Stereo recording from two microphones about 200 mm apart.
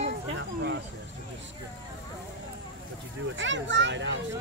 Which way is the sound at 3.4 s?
65° right (ahead or behind).